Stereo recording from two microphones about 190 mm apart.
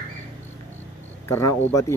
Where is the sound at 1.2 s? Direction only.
15° left (ahead or behind).